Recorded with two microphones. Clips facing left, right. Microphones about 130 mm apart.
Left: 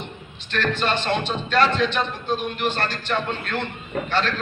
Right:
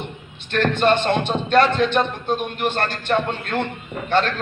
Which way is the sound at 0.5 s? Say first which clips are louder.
Right 6 dB; 55° right (ahead or behind).